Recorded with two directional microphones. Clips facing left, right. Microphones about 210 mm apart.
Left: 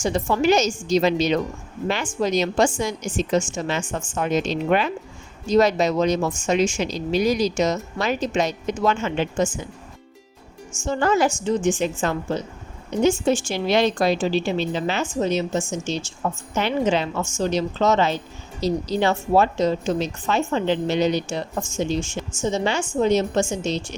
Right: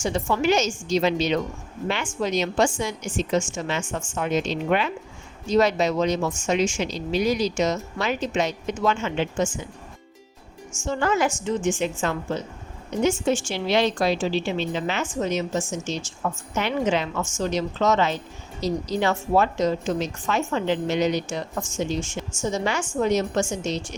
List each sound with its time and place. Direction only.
0.0 s a woman's voice: 40° left (ahead or behind)
10.8 s a woman's voice: 35° left (ahead or behind)